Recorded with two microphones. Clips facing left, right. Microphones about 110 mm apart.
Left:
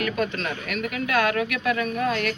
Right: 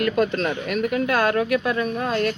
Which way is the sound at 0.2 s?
35° right (ahead or behind).